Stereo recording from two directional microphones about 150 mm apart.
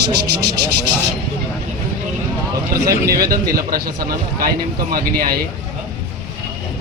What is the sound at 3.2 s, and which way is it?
A man's voice, 85° right.